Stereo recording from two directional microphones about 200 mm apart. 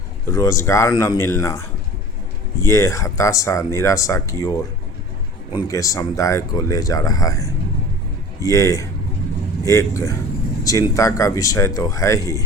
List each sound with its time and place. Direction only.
0.3 s speech: 15° left (ahead or behind)